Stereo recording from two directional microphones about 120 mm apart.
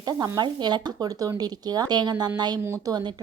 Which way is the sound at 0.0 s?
35° right (ahead or behind).